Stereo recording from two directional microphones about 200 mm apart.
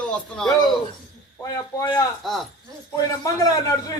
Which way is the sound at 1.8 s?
15° left (ahead or behind).